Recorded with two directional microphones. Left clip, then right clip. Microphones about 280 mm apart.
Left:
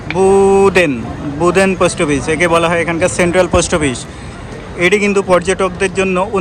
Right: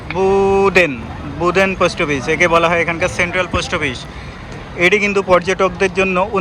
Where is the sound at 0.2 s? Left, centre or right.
Centre.